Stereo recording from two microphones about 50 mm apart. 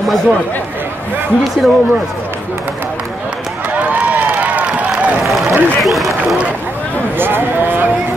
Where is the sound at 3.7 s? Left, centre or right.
Right.